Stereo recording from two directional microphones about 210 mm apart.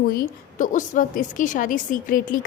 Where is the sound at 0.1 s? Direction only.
40° left (ahead or behind).